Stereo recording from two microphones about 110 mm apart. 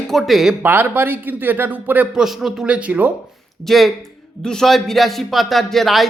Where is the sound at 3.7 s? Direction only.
Centre (ahead or behind).